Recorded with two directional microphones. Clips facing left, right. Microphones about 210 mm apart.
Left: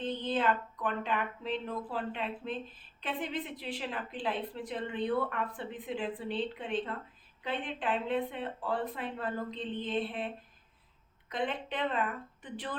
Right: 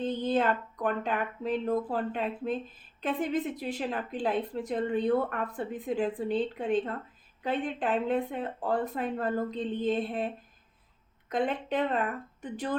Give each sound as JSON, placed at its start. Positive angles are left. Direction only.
{"t": 0.0, "sound": "a woman's voice", "side_deg": -45}